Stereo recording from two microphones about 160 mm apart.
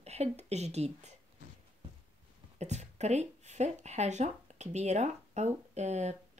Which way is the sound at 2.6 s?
45° right (ahead or behind).